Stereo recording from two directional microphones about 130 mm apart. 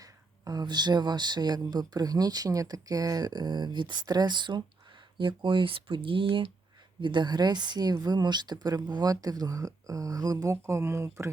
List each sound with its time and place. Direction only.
0.0 s a woman's voice: 30° right (ahead or behind)